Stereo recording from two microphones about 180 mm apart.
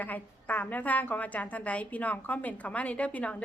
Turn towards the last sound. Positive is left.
turn(degrees=10)  # may be behind; listen again after turning